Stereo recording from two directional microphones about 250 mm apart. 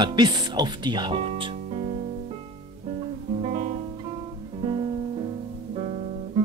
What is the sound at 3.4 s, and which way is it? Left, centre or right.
Guitar, right.